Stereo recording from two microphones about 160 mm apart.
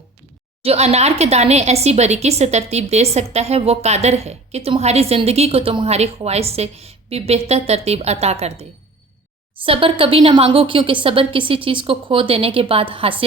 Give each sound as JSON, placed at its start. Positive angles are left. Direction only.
{"t": 0.6, "sound": "speech", "side_deg": -40}
{"t": 9.6, "sound": "speech", "side_deg": -35}